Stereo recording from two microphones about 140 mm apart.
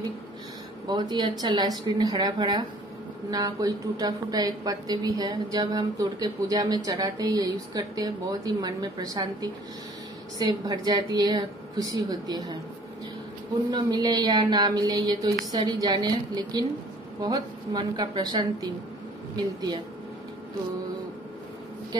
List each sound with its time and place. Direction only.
0.8 s a woman's voice: 30° right (ahead or behind)
13.7 s a woman's voice: 30° right (ahead or behind)